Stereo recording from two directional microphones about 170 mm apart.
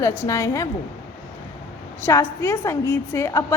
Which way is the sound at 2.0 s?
15° left (ahead or behind).